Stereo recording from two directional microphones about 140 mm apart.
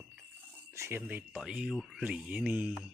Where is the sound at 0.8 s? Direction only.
15° right (ahead or behind).